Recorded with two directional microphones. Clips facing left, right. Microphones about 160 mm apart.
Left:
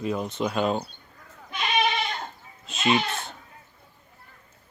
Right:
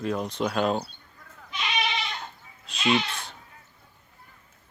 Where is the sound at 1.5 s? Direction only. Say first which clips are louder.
Left 5 dB; 50° left (ahead or behind).